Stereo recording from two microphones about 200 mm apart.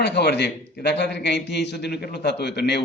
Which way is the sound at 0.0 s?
55° left (ahead or behind).